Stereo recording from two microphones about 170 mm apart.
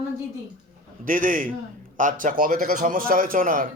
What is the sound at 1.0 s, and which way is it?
A man's voice, 50° right (ahead or behind).